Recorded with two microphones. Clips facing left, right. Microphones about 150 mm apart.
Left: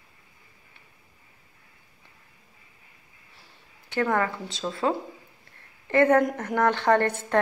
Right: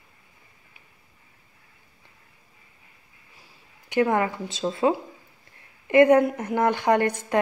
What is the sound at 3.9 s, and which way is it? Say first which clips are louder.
A woman's voice: right 3 dB; 15° right (ahead or behind).